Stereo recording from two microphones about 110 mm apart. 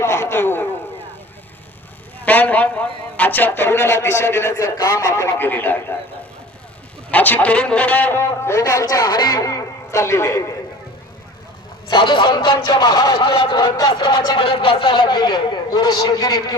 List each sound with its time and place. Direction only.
0.0 s a sound: 25° left (ahead or behind)
2.2 s a man's voice: 15° left (ahead or behind)
7.1 s a man's voice: 15° left (ahead or behind)
11.9 s speech: 50° left (ahead or behind)
13.1 s speech: 55° left (ahead or behind)
13.7 s speech: 40° left (ahead or behind)